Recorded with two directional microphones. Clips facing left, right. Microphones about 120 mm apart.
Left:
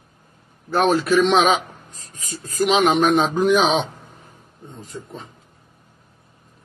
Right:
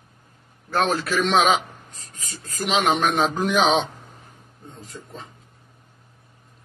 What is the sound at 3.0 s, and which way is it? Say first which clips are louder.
Speech: left 5 dB; 25° left (ahead or behind).